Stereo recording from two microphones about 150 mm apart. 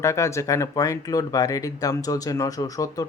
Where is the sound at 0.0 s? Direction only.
20° left (ahead or behind).